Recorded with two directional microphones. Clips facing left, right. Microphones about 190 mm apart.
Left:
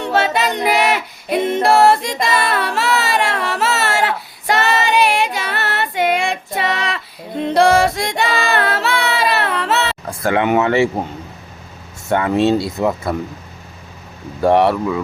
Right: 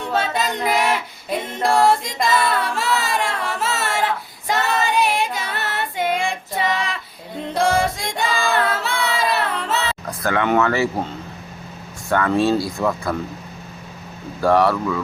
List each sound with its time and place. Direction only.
0.0 s female singing: 75° left (ahead or behind)
10.1 s a sound: 25° left (ahead or behind)
10.6 s speech: 25° left (ahead or behind)
12.0 s speech: 20° left (ahead or behind)
14.4 s speech: 25° left (ahead or behind)